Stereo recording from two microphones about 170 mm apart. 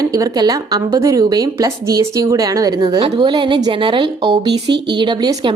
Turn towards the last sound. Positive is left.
turn(degrees=-25)  # may be behind; listen again after turning